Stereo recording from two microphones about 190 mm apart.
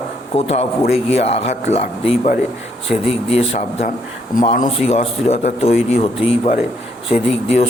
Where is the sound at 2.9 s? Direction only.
50° left (ahead or behind).